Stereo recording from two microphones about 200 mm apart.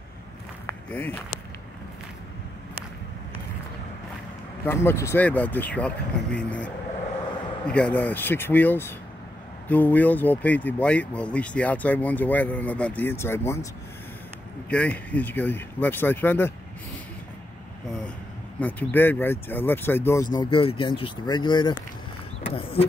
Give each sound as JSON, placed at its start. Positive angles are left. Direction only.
{"t": 0.7, "sound": "a sound", "side_deg": 10}
{"t": 4.6, "sound": "speech", "side_deg": 15}
{"t": 14.7, "sound": "speech", "side_deg": 5}
{"t": 18.6, "sound": "speech", "side_deg": 10}
{"t": 20.3, "sound": "speech", "side_deg": 25}